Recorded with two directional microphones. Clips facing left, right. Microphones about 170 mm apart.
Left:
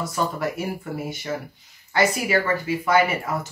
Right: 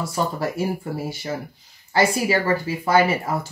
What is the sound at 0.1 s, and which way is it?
Speech, 30° right (ahead or behind).